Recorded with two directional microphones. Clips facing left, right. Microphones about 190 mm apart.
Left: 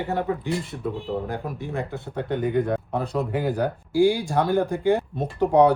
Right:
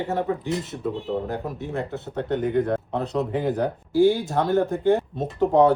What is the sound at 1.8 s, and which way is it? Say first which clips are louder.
Speech: right 1 dB; 10° left (ahead or behind).